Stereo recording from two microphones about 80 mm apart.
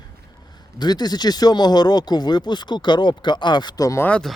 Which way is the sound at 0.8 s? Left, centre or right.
Left.